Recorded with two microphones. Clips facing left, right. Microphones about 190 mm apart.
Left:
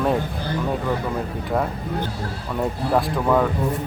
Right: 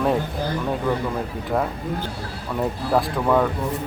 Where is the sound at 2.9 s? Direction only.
Centre (ahead or behind).